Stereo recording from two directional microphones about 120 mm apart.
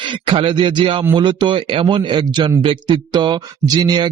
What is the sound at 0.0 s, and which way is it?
A man's voice, 45° right (ahead or behind).